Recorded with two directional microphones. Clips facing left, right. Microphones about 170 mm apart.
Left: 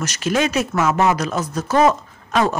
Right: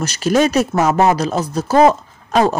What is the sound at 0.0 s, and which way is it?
Speech, 35° right (ahead or behind).